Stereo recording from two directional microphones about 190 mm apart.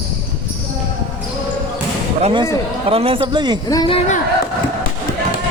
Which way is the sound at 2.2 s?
25° right (ahead or behind).